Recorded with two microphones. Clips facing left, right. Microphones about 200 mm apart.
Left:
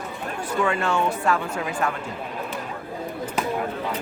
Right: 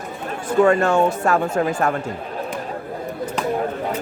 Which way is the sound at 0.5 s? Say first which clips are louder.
Right 8 dB; 45° right (ahead or behind).